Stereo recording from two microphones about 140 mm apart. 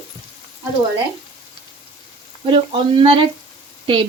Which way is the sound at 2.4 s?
40° right (ahead or behind).